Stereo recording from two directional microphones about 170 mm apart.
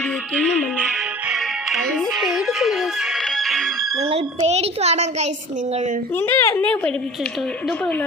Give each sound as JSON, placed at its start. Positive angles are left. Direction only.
{"t": 0.3, "sound": "music", "side_deg": -10}
{"t": 4.0, "sound": "a sound", "side_deg": -40}
{"t": 6.1, "sound": "speech", "side_deg": 15}